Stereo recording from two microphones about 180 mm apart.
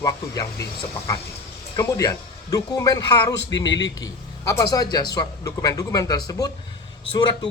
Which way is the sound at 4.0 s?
20° left (ahead or behind).